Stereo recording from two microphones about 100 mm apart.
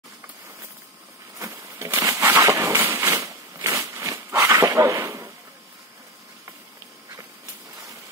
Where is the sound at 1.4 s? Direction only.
25° right (ahead or behind).